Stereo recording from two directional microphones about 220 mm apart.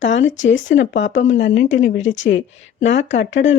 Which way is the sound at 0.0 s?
60° left (ahead or behind).